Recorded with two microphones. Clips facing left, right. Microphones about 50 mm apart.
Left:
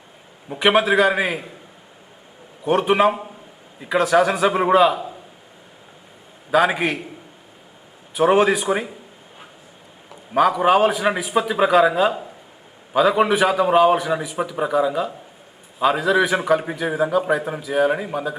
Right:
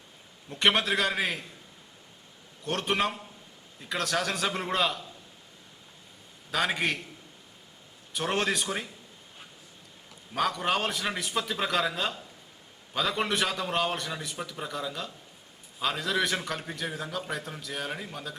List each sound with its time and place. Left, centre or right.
0.5 s a man's voice: centre
2.6 s a man's voice: centre
6.5 s a man's voice: centre
8.1 s a man's voice: centre
10.3 s a man's voice: centre